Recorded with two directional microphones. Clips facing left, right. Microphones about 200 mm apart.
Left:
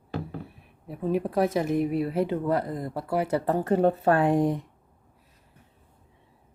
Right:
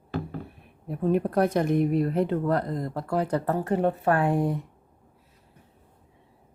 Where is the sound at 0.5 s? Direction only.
Centre (ahead or behind).